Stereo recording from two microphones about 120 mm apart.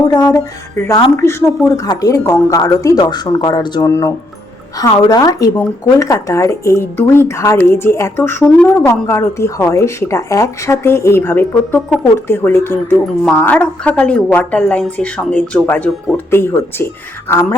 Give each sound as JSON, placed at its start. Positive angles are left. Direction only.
{"t": 0.0, "sound": "speech", "side_deg": 35}